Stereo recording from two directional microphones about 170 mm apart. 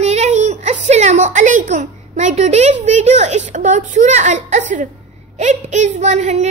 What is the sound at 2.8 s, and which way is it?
Speech, 40° right (ahead or behind).